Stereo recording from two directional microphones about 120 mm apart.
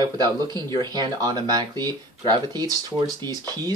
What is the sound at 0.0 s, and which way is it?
Speech, 35° right (ahead or behind).